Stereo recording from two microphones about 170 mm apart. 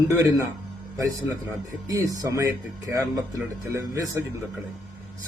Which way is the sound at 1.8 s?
20° right (ahead or behind).